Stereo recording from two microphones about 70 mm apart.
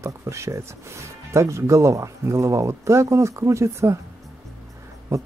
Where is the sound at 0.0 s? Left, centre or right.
Right.